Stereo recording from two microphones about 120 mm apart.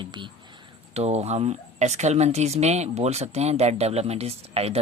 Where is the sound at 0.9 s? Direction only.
65° right (ahead or behind).